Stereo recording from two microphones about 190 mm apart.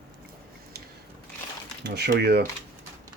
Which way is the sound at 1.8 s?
60° right (ahead or behind).